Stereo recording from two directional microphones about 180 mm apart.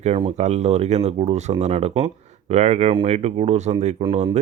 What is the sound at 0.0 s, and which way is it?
Speech, 35° right (ahead or behind).